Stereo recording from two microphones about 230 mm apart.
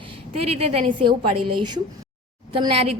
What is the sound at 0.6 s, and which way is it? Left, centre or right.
A woman's voice, right.